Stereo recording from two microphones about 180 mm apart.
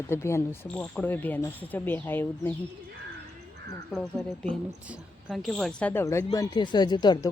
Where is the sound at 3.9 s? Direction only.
5° left (ahead or behind).